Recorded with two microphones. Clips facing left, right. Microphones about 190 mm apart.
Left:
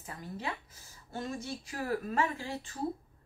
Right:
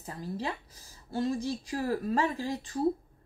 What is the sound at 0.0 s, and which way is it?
Speech, 35° right (ahead or behind).